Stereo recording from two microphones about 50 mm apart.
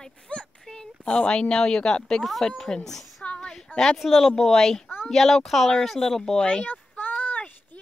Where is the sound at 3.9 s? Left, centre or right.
Centre.